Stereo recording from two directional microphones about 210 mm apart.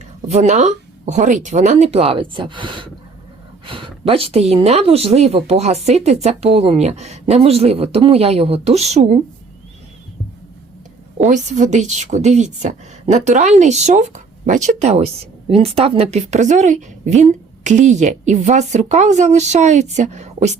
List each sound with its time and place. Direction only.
0.3 s a woman's voice: 35° right (ahead or behind)
11.3 s a woman's voice: 35° right (ahead or behind)